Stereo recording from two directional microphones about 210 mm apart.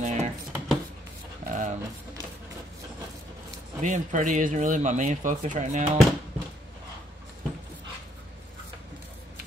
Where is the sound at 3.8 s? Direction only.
35° right (ahead or behind).